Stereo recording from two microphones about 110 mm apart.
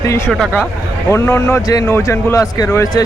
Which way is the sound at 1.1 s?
20° left (ahead or behind).